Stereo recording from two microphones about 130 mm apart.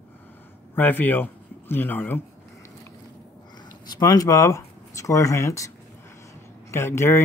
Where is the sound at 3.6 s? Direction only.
30° left (ahead or behind).